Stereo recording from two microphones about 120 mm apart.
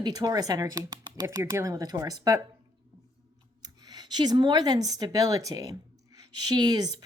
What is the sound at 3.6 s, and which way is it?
Speech, 35° right (ahead or behind).